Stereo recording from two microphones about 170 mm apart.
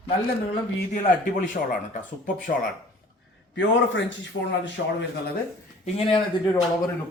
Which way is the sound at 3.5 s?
90° left.